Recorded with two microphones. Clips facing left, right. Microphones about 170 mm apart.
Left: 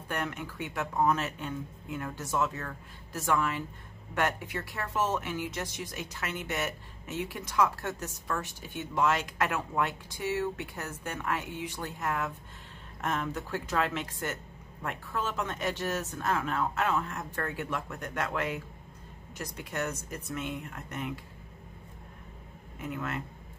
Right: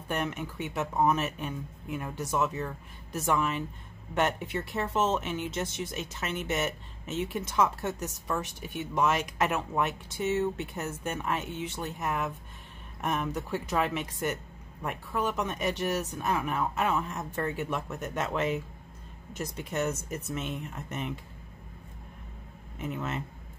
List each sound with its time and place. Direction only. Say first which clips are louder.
0.1 s speech: right 3 dB; 20° right (ahead or behind)
22.9 s speech: even; 20° right (ahead or behind)